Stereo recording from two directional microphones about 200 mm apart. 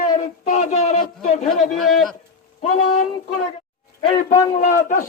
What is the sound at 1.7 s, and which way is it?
Speech, centre (ahead or behind).